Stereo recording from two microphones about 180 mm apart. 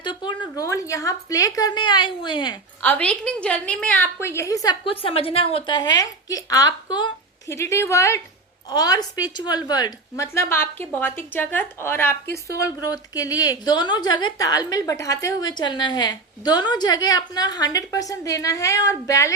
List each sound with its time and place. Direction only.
0.0 s speech: 25° left (ahead or behind)
2.8 s a woman's voice: 10° left (ahead or behind)